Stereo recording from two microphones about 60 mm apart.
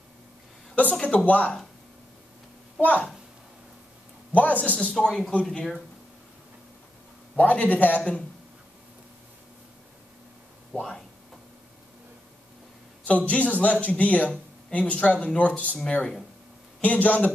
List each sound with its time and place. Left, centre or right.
1.0 s speech: left
2.8 s speech: left
4.3 s speech: left
5.0 s speech: centre
7.3 s speech: left
13.3 s speech: left